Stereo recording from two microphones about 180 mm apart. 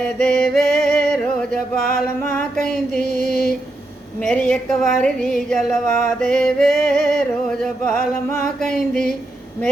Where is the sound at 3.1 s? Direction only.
55° left (ahead or behind).